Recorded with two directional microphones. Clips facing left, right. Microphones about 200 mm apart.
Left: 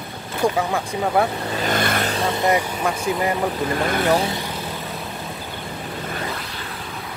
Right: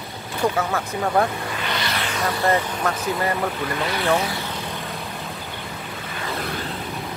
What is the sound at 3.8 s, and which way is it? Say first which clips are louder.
Speech: left 3 dB; 50° left (ahead or behind).